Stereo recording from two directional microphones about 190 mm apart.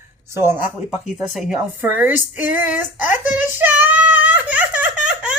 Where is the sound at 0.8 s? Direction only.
Centre (ahead or behind).